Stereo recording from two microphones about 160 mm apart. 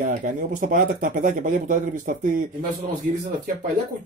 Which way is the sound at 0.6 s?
55° right (ahead or behind).